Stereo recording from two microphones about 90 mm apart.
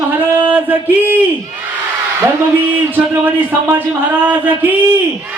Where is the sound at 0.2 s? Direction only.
20° right (ahead or behind).